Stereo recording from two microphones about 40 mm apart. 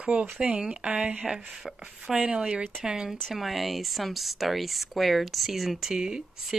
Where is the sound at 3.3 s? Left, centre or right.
Centre.